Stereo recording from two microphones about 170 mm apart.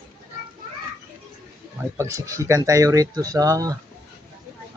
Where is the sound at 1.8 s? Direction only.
15° right (ahead or behind).